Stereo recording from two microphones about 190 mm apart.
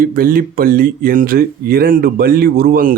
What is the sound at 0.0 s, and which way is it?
Speech, 50° right (ahead or behind).